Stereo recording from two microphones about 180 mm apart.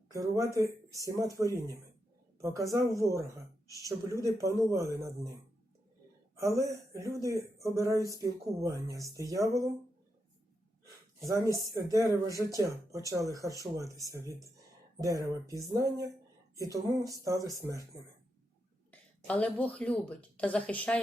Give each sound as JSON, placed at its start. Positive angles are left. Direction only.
{"t": 0.1, "sound": "speech", "side_deg": -15}
{"t": 6.3, "sound": "speech", "side_deg": -15}
{"t": 11.2, "sound": "speech", "side_deg": -20}
{"t": 15.0, "sound": "speech", "side_deg": -20}
{"t": 18.9, "sound": "a woman's voice", "side_deg": 10}